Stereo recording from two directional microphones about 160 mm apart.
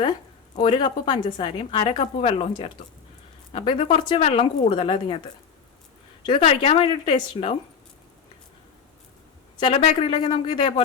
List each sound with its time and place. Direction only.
0.6 s a woman's voice: 30° left (ahead or behind)
4.2 s a woman's voice: 40° left (ahead or behind)
6.2 s a woman's voice: 35° left (ahead or behind)
9.6 s a woman's voice: 35° left (ahead or behind)